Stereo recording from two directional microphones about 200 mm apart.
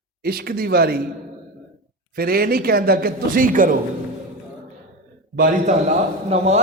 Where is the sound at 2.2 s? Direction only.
50° right (ahead or behind).